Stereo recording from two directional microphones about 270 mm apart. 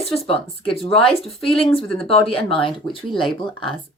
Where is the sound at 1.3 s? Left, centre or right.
Centre.